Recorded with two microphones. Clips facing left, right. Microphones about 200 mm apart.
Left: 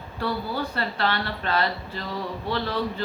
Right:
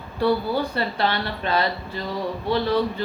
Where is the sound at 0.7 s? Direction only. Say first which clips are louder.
Right 3 dB; 15° right (ahead or behind).